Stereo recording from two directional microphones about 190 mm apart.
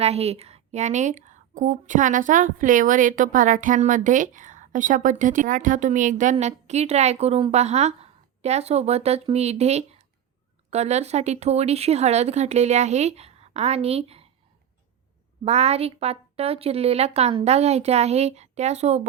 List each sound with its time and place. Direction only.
0.0 s a woman's voice: 35° right (ahead or behind)
15.4 s a woman's voice: 35° right (ahead or behind)